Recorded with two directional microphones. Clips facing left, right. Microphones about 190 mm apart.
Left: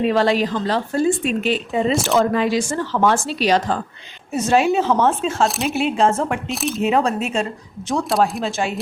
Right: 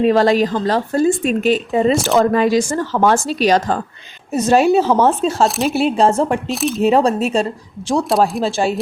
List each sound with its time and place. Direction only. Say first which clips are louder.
0.0 s a woman's voice: right 4 dB; 40° right (ahead or behind)
1.9 s speech: right 2 dB; centre (ahead or behind)
2.1 s a woman's voice: right 3 dB; 45° right (ahead or behind)
5.5 s speech: right 4 dB; centre (ahead or behind)
5.7 s speech: right 4 dB; 35° right (ahead or behind)
6.5 s speech: right 4 dB; centre (ahead or behind)
6.8 s speech: right 5 dB; 35° right (ahead or behind)
8.4 s speech: right 5 dB; 30° right (ahead or behind)